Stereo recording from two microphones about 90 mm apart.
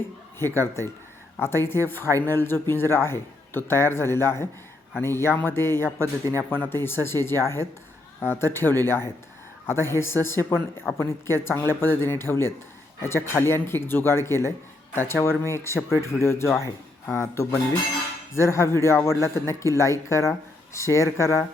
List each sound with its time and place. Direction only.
0.3 s a man's voice: 25° left (ahead or behind)
6.0 s speech: 35° right (ahead or behind)
6.5 s a man's voice: 25° left (ahead or behind)